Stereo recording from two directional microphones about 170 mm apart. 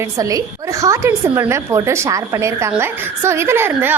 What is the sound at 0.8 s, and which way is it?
A woman's voice, 15° right (ahead or behind).